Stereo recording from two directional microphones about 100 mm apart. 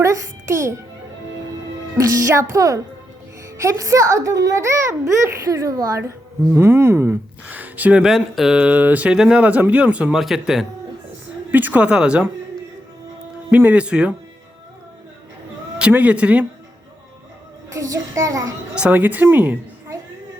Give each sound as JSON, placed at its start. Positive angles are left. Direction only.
{"t": 0.0, "sound": "a child's voice", "side_deg": -30}
{"t": 2.0, "sound": "a child's voice", "side_deg": -30}
{"t": 6.0, "sound": "speech", "side_deg": -25}
{"t": 11.5, "sound": "speech", "side_deg": -15}
{"t": 13.5, "sound": "speech", "side_deg": -15}
{"t": 15.8, "sound": "speech", "side_deg": -15}
{"t": 17.7, "sound": "a child's voice", "side_deg": -35}
{"t": 18.7, "sound": "speech", "side_deg": -15}